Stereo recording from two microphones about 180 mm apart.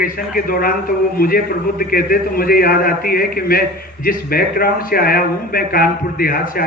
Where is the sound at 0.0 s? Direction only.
55° left (ahead or behind).